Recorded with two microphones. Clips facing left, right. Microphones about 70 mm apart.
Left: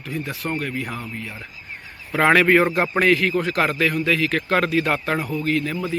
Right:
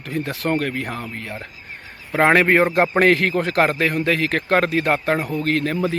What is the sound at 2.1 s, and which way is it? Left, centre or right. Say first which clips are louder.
Speech: right 1 dB; right.